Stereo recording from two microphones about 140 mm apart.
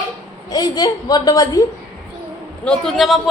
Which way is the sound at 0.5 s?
30° left (ahead or behind).